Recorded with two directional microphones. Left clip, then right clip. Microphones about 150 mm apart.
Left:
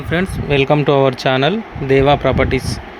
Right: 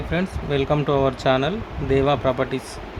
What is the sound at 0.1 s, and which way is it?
Speech, 25° left (ahead or behind).